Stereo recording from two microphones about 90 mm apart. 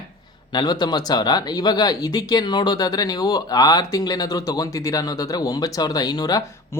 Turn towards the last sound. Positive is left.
turn(degrees=50)  # may be behind; listen again after turning